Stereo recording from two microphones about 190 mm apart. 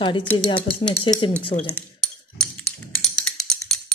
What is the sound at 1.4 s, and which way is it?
Speech, 25° left (ahead or behind).